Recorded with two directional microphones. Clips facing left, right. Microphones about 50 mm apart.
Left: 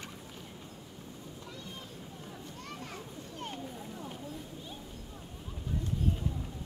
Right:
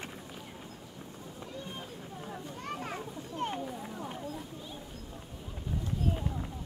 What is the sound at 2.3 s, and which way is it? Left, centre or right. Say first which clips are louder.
Children playing: right 7 dB; right.